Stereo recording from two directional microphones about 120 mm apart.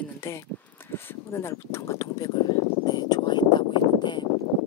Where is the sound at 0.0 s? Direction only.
20° left (ahead or behind); by 4.3 s 40° left (ahead or behind).